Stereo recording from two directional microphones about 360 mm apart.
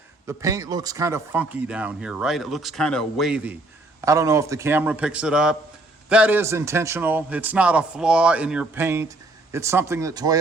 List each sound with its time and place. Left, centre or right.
0.3 s a man's voice: centre